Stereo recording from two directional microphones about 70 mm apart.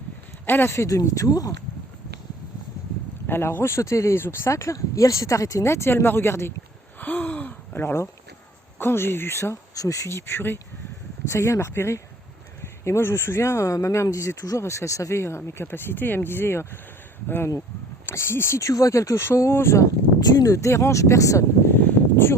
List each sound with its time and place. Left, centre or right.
0.4 s speech: left
0.9 s speech: left
3.2 s speech: left
7.0 s gasp: left
7.8 s speech: left
9.7 s speech: left
20.1 s speech: left
21.7 s a sound: left